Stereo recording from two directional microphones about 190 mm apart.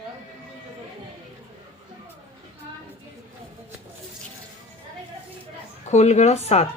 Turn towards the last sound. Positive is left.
turn(degrees=35)  # may be behind; listen again after turning